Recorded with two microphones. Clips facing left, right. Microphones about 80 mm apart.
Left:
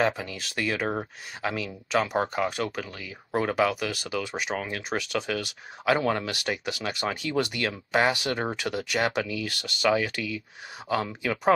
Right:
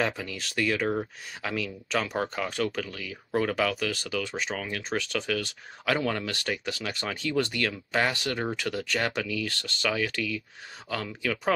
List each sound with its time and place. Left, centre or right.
0.0 s speech: centre